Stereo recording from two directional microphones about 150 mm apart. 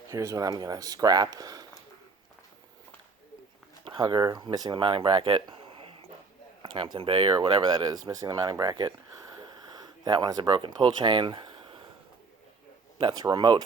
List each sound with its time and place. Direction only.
0.1 s speech: 20° right (ahead or behind)
3.8 s speech: 30° right (ahead or behind)
13.0 s speech: 30° right (ahead or behind)